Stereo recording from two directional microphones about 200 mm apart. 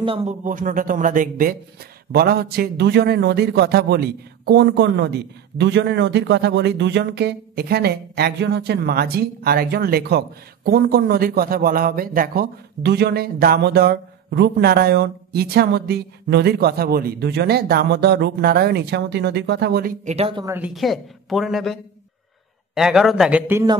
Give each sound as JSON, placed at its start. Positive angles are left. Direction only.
{"t": 0.0, "sound": "a man's voice", "side_deg": -30}
{"t": 20.2, "sound": "speech", "side_deg": -30}
{"t": 20.4, "sound": "a woman's voice", "side_deg": -10}
{"t": 22.8, "sound": "a woman's voice", "side_deg": 0}